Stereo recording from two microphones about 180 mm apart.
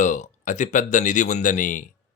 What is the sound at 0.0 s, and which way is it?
Speech, 45° left (ahead or behind).